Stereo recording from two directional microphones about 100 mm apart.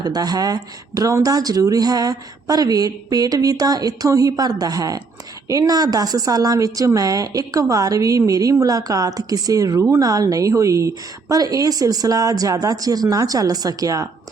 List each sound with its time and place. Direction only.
0.0 s speech: 40° right (ahead or behind)